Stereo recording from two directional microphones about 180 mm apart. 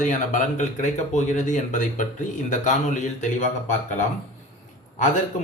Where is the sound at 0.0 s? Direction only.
45° left (ahead or behind).